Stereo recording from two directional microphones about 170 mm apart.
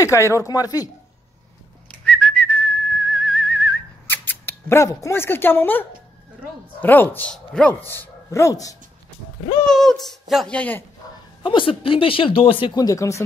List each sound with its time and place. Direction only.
0.0 s speech: 15° left (ahead or behind)
1.9 s whistling: 5° left (ahead or behind)
6.8 s speech: 10° left (ahead or behind)
9.7 s speech: centre (ahead or behind)
11.4 s speech: 30° left (ahead or behind)